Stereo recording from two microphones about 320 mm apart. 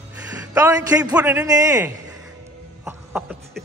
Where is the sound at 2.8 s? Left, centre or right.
Centre.